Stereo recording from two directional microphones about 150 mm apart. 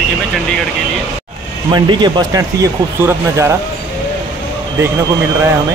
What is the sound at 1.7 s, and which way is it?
Speech, 30° right (ahead or behind).